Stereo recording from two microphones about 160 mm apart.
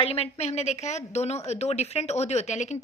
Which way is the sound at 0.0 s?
40° left (ahead or behind).